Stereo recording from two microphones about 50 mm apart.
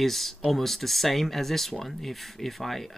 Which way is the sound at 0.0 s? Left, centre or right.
Centre.